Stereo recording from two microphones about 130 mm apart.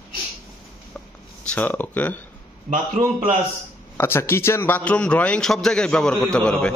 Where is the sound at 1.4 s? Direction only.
10° left (ahead or behind).